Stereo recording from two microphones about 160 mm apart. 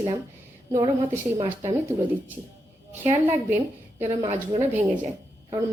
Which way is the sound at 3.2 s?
15° right (ahead or behind).